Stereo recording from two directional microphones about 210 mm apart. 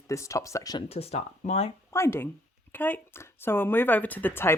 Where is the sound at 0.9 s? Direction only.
30° left (ahead or behind).